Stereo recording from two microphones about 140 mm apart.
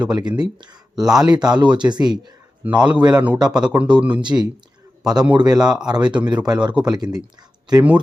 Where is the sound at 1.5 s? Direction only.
30° right (ahead or behind).